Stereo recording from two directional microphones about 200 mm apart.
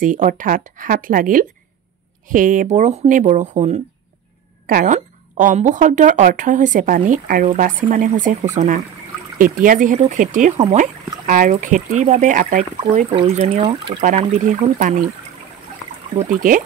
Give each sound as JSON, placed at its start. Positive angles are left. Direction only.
{"t": 0.0, "sound": "speech", "side_deg": -40}
{"t": 14.0, "sound": "speech", "side_deg": -35}
{"t": 16.2, "sound": "speech", "side_deg": -40}